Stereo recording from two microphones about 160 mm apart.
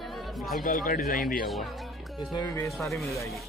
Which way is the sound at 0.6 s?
60° left (ahead or behind).